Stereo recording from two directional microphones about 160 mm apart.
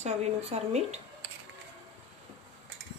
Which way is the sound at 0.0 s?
45° right (ahead or behind).